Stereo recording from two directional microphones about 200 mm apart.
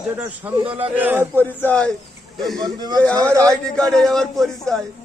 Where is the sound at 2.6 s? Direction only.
20° right (ahead or behind).